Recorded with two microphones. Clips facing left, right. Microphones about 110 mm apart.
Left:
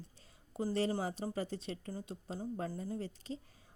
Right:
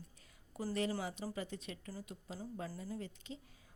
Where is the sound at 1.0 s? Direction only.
40° left (ahead or behind).